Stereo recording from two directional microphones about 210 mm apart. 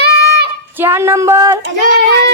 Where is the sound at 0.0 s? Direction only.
50° right (ahead or behind).